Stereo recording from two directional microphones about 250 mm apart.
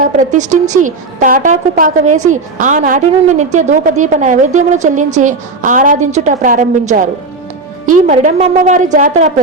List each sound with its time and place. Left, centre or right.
0.0 s a woman's voice: right